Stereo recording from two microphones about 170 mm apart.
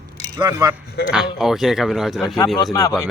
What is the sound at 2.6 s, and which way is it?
Speech, 20° left (ahead or behind).